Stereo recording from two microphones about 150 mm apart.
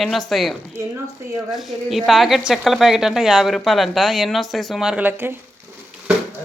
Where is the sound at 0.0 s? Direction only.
Centre (ahead or behind).